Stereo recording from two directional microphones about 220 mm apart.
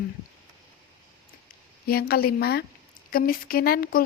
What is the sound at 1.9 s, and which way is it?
Speech, 45° left (ahead or behind).